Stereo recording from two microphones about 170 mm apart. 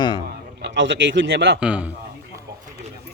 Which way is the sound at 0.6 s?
90° right.